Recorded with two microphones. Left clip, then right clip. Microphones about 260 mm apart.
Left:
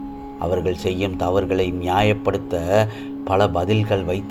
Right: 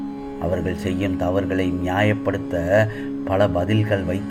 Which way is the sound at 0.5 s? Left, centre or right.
Centre.